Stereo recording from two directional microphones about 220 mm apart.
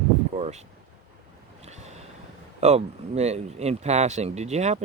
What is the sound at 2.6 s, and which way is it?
Speech, 30° right (ahead or behind).